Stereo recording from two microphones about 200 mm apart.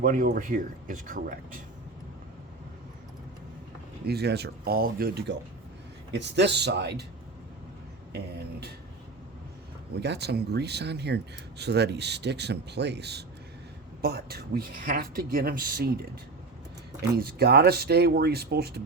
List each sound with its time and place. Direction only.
0.0 s speech: 45° right (ahead or behind)
4.0 s speech: 55° right (ahead or behind)
8.1 s speech: 55° right (ahead or behind)
10.0 s speech: 55° right (ahead or behind)
17.0 s speech: 50° right (ahead or behind)